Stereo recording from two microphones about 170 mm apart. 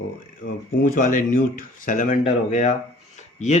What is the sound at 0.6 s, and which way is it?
Speech, 55° left (ahead or behind).